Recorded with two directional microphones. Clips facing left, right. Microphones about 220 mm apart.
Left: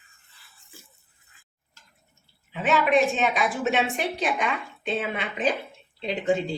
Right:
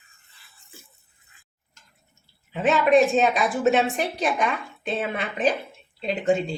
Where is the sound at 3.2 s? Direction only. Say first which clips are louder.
Right 4 dB; 40° right (ahead or behind).